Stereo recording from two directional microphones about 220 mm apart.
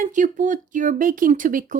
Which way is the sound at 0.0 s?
35° right (ahead or behind).